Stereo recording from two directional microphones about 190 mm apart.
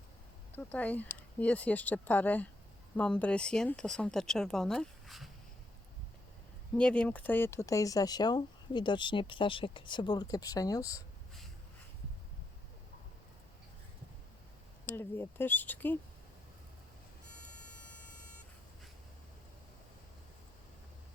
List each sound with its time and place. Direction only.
0.5 s speech: 10° left (ahead or behind)
6.7 s speech: 5° left (ahead or behind)
14.8 s speech: 10° left (ahead or behind)